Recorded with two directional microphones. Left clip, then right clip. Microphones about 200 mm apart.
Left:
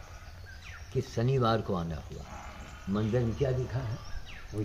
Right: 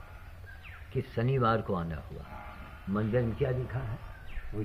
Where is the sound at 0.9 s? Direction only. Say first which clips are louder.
Left 1 dB; 15° left (ahead or behind).